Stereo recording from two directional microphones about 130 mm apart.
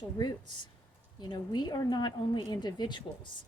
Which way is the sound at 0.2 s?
35° left (ahead or behind).